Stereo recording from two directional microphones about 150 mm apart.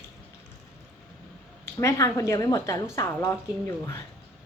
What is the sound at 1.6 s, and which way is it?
A woman's voice, 20° left (ahead or behind).